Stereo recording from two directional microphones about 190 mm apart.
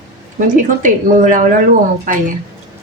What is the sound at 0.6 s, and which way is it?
Speech, 45° right (ahead or behind).